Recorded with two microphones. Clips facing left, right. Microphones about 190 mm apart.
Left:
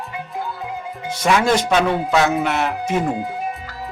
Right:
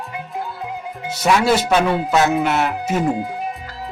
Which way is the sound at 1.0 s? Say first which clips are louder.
Right 1 dB; 5° right (ahead or behind).